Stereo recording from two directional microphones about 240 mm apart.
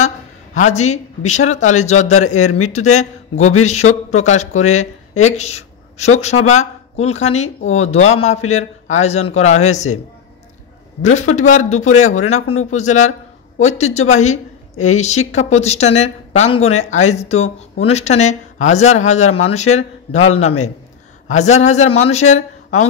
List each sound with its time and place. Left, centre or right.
0.6 s a woman's voice: left
3.8 s speech: left
4.2 s a woman's voice: left
11.0 s a woman's voice: left
12.1 s speech: left
12.7 s a woman's voice: left
20.2 s speech: left
21.3 s a woman's voice: left